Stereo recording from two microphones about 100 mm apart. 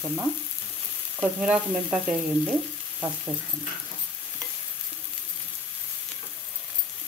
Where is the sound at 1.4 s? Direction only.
5° right (ahead or behind).